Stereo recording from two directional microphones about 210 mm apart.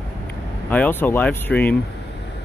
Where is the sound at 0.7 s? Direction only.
10° left (ahead or behind).